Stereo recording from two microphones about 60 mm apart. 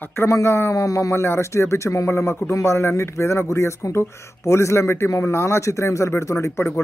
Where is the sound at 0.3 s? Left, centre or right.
Left.